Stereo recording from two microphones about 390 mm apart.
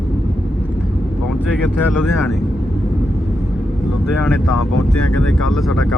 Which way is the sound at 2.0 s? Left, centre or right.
Centre.